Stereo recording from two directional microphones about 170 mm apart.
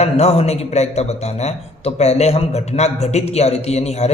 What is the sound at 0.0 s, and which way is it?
A man's voice, 40° left (ahead or behind).